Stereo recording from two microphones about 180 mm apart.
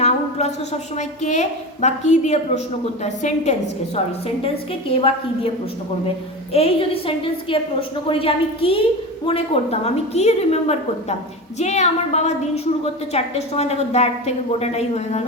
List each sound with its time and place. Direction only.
0.0 s a sound: 40° left (ahead or behind)
0.9 s a woman's voice: 40° left (ahead or behind)
6.5 s a woman's voice: 30° left (ahead or behind)